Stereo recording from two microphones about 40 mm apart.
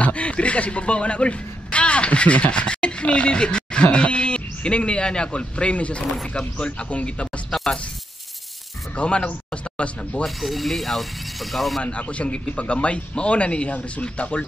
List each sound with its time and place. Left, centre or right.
0.0 s a man's voice: left
8.9 s speech: left
10.2 s speech: centre
11.8 s a man's voice: left